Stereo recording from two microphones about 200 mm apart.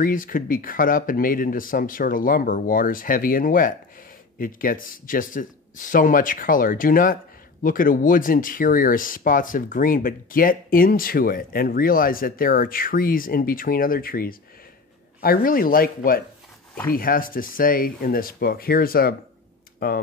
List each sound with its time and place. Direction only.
0.0 s speech: 45° left (ahead or behind)